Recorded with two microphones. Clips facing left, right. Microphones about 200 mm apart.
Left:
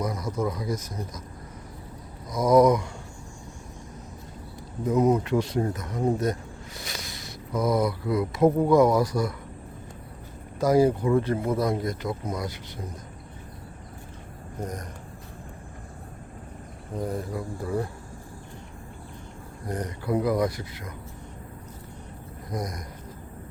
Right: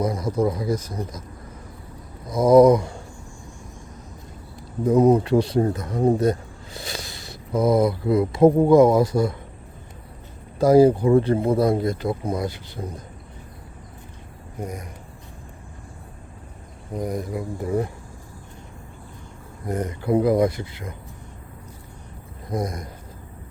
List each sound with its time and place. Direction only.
0.0 s speech: 30° right (ahead or behind)
2.3 s speech: 30° right (ahead or behind)
4.9 s speech: 30° right (ahead or behind)
10.6 s speech: 30° right (ahead or behind)
14.6 s speech: 10° right (ahead or behind)
16.9 s speech: 15° right (ahead or behind)
19.6 s speech: 25° right (ahead or behind)
22.5 s speech: 25° right (ahead or behind)